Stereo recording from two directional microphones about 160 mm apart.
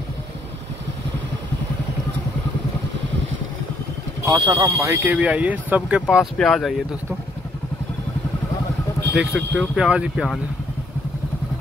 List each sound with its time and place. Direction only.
4.3 s speech: 25° right (ahead or behind); by 6.7 s 5° left (ahead or behind)
9.1 s speech: 5° right (ahead or behind)